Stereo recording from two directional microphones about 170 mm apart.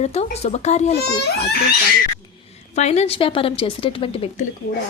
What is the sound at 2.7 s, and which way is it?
A woman's voice, 40° left (ahead or behind).